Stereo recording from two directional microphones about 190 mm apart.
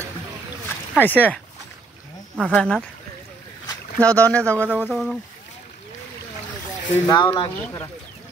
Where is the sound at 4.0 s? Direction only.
5° left (ahead or behind).